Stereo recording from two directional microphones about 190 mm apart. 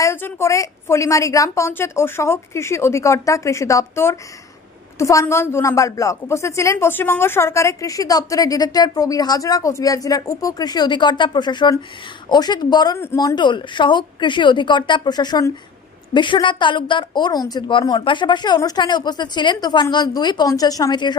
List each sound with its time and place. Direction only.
0.0 s a woman's voice: 10° left (ahead or behind)